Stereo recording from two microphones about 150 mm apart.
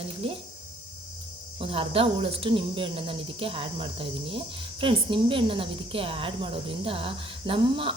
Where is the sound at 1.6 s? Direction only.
40° right (ahead or behind).